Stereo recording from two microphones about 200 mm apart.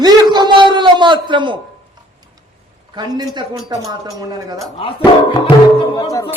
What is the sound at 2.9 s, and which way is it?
A man's voice, 20° right (ahead or behind).